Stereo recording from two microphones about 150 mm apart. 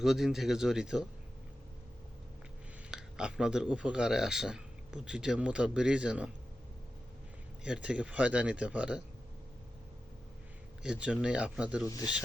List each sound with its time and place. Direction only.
0.0 s speech: 5° right (ahead or behind)
2.9 s speech: 5° right (ahead or behind)
7.6 s speech: 5° right (ahead or behind)
10.8 s speech: 10° right (ahead or behind)
11.9 s speech: 25° left (ahead or behind)